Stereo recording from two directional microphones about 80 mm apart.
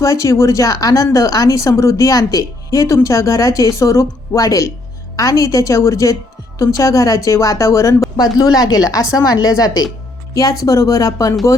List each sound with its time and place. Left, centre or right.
0.0 s speech: left
8.1 s speech: left